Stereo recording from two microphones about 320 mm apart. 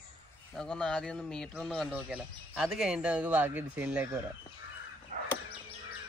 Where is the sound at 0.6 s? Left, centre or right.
Centre.